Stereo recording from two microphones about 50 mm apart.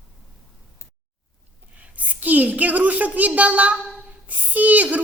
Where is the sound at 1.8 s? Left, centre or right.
Right.